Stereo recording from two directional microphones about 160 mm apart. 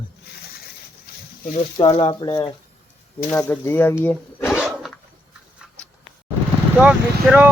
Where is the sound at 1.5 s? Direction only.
35° left (ahead or behind).